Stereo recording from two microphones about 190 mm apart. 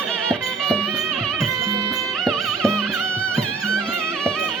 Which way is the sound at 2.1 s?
Centre (ahead or behind).